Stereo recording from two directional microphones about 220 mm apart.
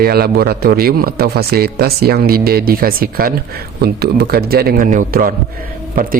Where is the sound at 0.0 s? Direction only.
45° right (ahead or behind).